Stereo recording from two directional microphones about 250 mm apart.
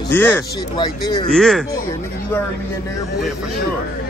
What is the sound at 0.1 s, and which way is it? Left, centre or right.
Speech, centre.